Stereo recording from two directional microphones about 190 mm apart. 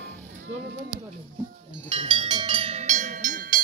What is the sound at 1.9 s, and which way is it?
Music, 25° right (ahead or behind).